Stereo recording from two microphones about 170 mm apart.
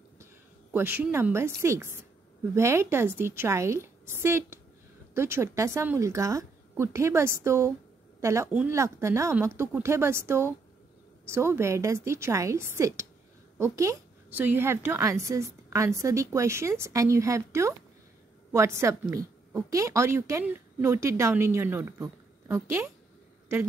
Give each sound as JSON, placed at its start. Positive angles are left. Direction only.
{"t": 0.7, "sound": "a woman's voice", "side_deg": -15}